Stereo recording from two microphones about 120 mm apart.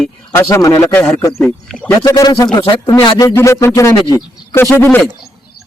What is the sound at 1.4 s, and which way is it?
Speech, 5° left (ahead or behind).